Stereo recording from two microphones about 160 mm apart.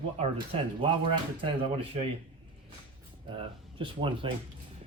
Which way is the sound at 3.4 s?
30° right (ahead or behind).